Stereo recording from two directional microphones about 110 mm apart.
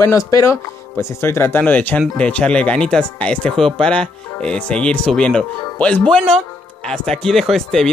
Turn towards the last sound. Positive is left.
turn(degrees=5)  # may be behind; listen again after turning